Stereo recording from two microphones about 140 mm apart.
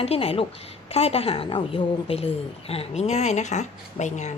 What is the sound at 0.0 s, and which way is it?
A woman's voice, 45° left (ahead or behind).